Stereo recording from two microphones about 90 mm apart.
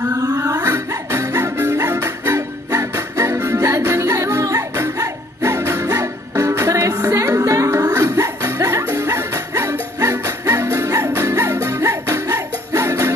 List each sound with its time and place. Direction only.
0.1 s music: 40° right (ahead or behind)